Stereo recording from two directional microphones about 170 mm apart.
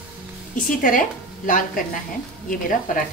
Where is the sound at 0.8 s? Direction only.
50° left (ahead or behind).